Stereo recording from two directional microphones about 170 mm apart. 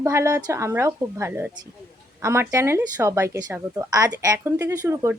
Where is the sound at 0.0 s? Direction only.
15° right (ahead or behind).